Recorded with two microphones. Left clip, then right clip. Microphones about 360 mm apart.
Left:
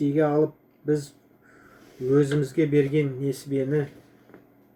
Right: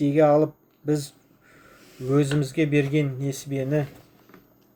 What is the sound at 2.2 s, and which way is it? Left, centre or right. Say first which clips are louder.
Speech: even; right.